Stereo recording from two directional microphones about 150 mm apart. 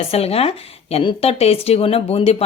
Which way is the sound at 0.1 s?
40° left (ahead or behind).